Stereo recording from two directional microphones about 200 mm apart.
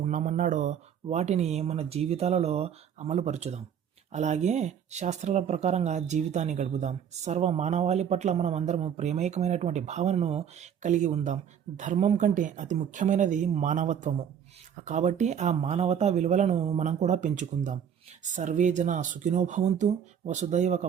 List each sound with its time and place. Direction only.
0.0 s speech: 40° right (ahead or behind)